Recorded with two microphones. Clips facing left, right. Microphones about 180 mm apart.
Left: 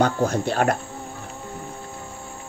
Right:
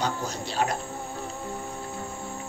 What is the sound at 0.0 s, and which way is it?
Speech, 55° left (ahead or behind).